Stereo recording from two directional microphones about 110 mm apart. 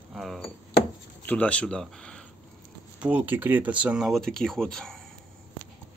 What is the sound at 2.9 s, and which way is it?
Speech, 15° right (ahead or behind).